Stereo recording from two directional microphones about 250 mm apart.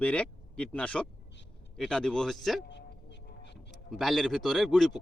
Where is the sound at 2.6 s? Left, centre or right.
Left.